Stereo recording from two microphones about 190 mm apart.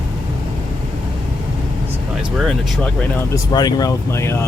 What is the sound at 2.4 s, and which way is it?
Speech, 5° left (ahead or behind).